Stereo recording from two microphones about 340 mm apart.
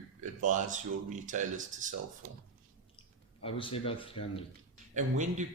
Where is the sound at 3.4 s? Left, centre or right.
Centre.